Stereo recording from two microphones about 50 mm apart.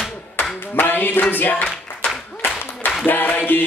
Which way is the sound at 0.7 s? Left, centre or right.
Left.